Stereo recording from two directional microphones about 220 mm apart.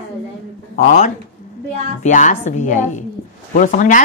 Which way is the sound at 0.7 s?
35° left (ahead or behind).